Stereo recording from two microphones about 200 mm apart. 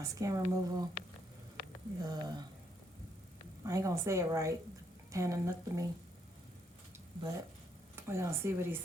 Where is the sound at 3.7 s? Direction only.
15° right (ahead or behind).